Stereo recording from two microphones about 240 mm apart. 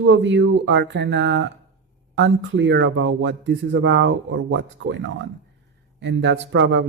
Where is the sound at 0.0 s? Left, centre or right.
Right.